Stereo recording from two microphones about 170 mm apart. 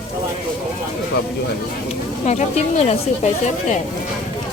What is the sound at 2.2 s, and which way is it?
Speech, 40° left (ahead or behind).